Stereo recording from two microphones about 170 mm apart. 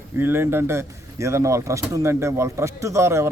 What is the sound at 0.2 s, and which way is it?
Speech, 15° right (ahead or behind).